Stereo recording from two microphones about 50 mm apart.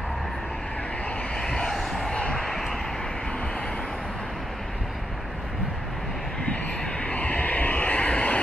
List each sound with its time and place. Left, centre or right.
1.3 s vehicle: centre
1.7 s a sound: centre
2.1 s vehicle: centre
2.4 s vehicle: centre
6.4 s vehicle: left